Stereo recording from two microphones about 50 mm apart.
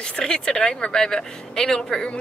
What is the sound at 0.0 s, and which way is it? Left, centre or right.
A woman's voice, left.